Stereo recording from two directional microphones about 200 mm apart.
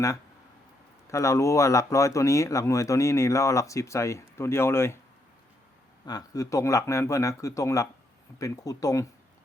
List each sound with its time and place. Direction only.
1.0 s speech: 15° left (ahead or behind)
6.1 s speech: 20° left (ahead or behind)